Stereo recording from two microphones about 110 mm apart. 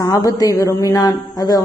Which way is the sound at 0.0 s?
35° left (ahead or behind).